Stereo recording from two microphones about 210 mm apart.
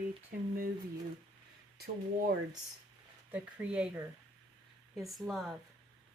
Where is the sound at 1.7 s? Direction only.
45° right (ahead or behind).